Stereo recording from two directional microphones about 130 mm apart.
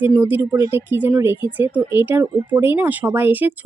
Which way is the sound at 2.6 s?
15° right (ahead or behind).